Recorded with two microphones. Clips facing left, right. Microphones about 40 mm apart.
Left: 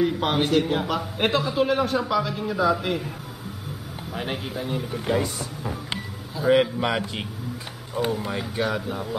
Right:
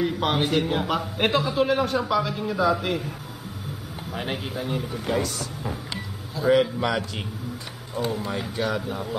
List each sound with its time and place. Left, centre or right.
0.0 s a man's voice: centre
4.1 s a man's voice: centre
5.2 s speech: centre
6.5 s speech: centre
8.3 s a man's voice: centre